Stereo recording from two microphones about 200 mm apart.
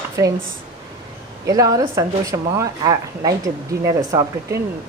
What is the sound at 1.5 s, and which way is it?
Speech, 20° right (ahead or behind).